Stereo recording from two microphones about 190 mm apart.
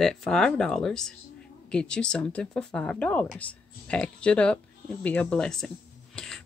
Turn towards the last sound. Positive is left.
turn(degrees=5)  # may be behind; listen again after turning